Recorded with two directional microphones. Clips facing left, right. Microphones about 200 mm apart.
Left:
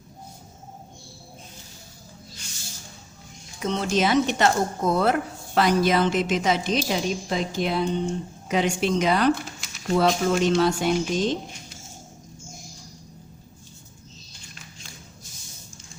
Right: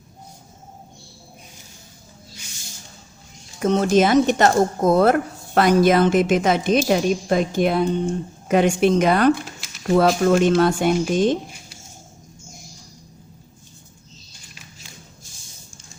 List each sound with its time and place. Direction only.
3.6 s speech: 50° right (ahead or behind)